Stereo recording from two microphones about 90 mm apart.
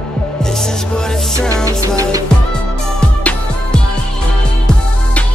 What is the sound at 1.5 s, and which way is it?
Music, 35° right (ahead or behind).